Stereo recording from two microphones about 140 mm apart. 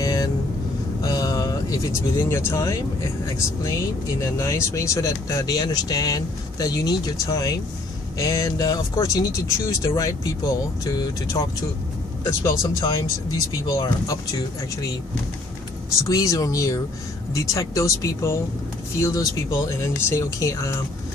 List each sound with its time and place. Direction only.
0.0 s vehicle: 25° left (ahead or behind)
3.6 s speech: 25° left (ahead or behind)
16.0 s speech: 25° left (ahead or behind)